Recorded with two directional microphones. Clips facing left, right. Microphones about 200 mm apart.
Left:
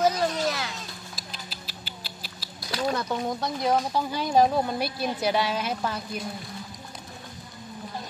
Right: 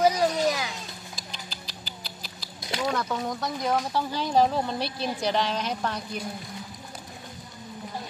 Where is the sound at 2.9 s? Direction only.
20° left (ahead or behind); by 6.0 s 5° left (ahead or behind).